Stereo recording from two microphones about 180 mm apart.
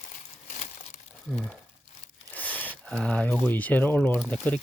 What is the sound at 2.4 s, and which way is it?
Speech, 10° left (ahead or behind).